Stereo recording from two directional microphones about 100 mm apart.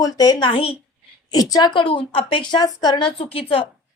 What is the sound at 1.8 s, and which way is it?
Speech, 60° left (ahead or behind).